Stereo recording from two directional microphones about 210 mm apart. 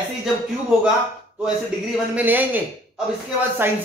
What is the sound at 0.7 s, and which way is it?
Speech, 5° right (ahead or behind).